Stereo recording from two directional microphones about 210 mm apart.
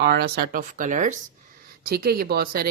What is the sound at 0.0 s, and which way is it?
Speech, 50° right (ahead or behind).